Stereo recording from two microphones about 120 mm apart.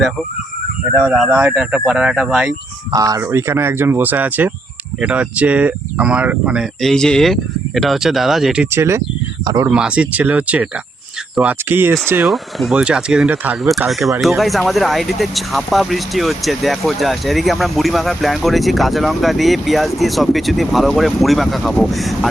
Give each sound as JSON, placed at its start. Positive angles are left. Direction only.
{"t": 1.0, "sound": "speech", "side_deg": -5}
{"t": 2.9, "sound": "speech", "side_deg": -30}
{"t": 6.8, "sound": "speech", "side_deg": 5}
{"t": 8.7, "sound": "speech", "side_deg": -20}
{"t": 9.6, "sound": "speech", "side_deg": -10}
{"t": 12.2, "sound": "speech", "side_deg": 0}
{"t": 13.7, "sound": "speech", "side_deg": 0}